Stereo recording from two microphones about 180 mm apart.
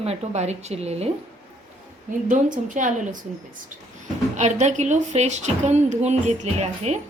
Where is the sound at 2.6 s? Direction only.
45° right (ahead or behind).